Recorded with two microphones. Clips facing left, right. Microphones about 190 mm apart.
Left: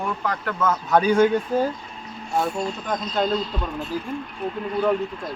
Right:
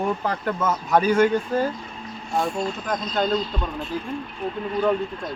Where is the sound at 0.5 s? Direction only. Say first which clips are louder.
Left 2 dB; 10° right (ahead or behind).